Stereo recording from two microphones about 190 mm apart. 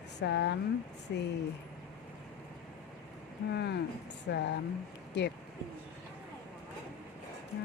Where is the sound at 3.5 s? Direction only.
60° left (ahead or behind).